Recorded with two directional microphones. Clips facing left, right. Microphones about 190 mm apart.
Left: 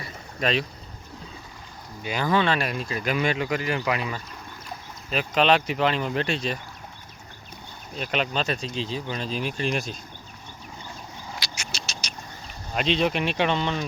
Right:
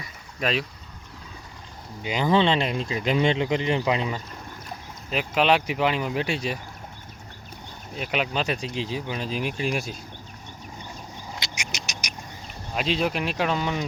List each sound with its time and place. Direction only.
0.3 s speech: 5° right (ahead or behind)
2.0 s speech: 20° right (ahead or behind)
5.1 s speech: 10° right (ahead or behind)
7.9 s speech: 10° right (ahead or behind)
11.3 s a sound: 20° right (ahead or behind)
12.7 s speech: 5° right (ahead or behind)